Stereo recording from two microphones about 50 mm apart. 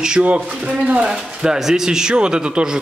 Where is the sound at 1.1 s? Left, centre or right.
Centre.